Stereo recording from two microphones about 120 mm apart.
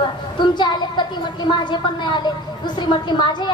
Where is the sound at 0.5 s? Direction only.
40° left (ahead or behind).